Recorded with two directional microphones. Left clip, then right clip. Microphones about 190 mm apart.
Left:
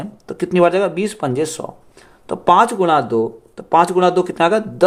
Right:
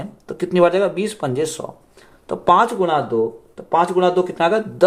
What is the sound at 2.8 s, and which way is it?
Speech, 40° left (ahead or behind).